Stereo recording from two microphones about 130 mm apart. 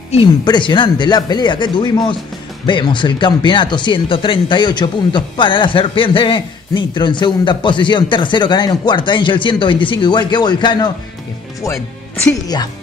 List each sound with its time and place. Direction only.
0.5 s speech: 35° left (ahead or behind)